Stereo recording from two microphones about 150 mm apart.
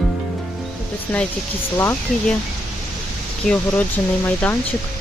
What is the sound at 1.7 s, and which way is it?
Speech, 20° left (ahead or behind).